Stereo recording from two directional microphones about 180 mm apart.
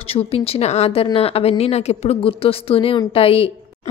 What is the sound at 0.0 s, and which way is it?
A woman's voice, 35° left (ahead or behind).